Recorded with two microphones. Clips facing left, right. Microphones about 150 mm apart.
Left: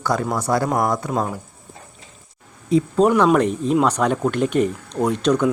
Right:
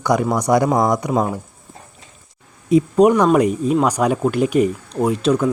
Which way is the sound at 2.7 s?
15° right (ahead or behind).